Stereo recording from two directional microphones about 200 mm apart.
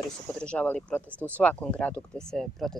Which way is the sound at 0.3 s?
5° left (ahead or behind).